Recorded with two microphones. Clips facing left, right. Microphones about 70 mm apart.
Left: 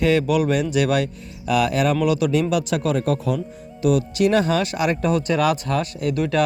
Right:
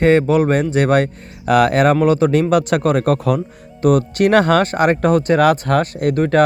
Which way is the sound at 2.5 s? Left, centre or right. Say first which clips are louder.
Right 6 dB; right.